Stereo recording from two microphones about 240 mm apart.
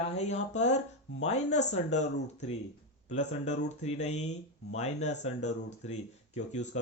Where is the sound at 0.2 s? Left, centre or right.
Left.